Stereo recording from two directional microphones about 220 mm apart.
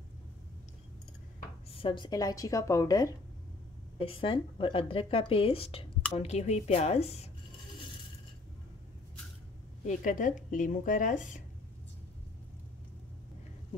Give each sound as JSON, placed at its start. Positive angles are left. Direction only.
{"t": 1.7, "sound": "speech", "side_deg": 25}
{"t": 9.8, "sound": "speech", "side_deg": 35}